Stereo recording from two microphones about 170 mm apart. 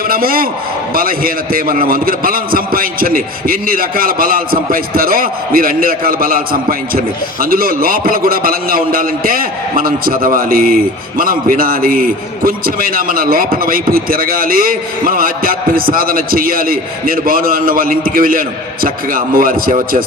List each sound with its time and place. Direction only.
0.1 s a man's voice: 60° right (ahead or behind)